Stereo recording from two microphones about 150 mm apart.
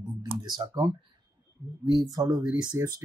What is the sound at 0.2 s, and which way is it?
Computer keyboard, 25° right (ahead or behind).